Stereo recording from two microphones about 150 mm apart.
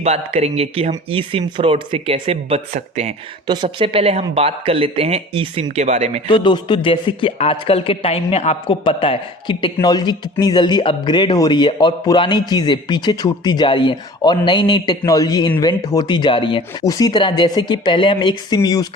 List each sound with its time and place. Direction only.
0.0 s speech: 45° right (ahead or behind)
3.4 s speech: 30° right (ahead or behind); by 6.2 s 50° right (ahead or behind)
6.2 s a man's voice: 30° left (ahead or behind)